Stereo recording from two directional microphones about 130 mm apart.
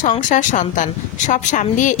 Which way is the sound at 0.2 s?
75° left (ahead or behind).